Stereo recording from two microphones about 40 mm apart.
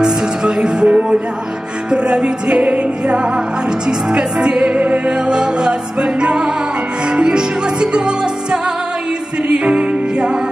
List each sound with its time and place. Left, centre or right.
0.6 s music: right
9.5 s music: right